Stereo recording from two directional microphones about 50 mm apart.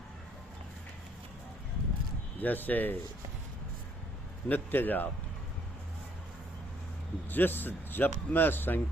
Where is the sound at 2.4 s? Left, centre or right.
Left.